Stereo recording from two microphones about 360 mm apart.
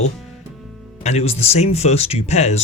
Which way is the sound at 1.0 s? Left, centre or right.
Centre.